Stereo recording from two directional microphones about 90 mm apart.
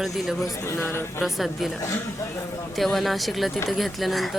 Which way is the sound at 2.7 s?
Centre (ahead or behind).